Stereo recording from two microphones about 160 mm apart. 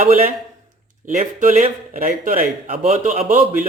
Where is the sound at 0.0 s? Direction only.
50° right (ahead or behind).